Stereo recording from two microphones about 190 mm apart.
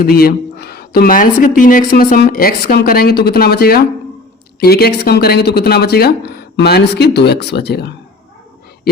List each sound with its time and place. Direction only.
0.0 s speech: 50° left (ahead or behind)